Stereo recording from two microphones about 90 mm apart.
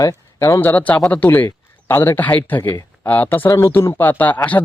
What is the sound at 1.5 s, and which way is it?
A man's voice, 30° left (ahead or behind).